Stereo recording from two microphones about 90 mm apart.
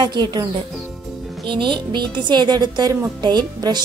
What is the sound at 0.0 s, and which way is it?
Speech, 50° right (ahead or behind).